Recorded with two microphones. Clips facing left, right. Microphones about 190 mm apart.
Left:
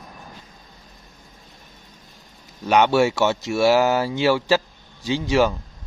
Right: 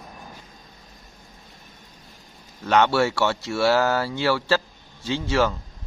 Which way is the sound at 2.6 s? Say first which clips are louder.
Left 3 dB; 15° left (ahead or behind).